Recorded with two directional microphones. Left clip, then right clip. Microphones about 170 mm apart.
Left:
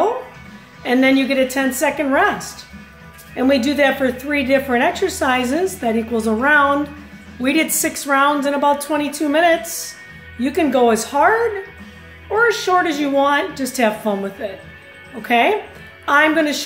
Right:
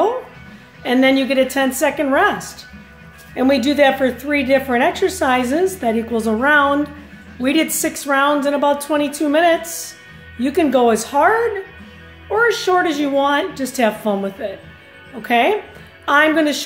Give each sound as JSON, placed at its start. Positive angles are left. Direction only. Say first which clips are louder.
{"t": 0.8, "sound": "a woman's voice", "louder": "even", "side_deg": -15}